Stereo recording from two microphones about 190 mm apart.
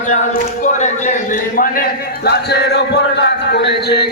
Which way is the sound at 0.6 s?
40° left (ahead or behind).